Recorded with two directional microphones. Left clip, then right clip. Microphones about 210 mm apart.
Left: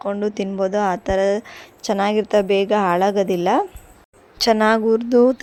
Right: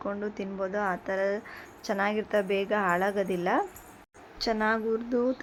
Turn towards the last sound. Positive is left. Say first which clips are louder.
# left 13 dB
turn(degrees=45)  # may be behind; listen again after turning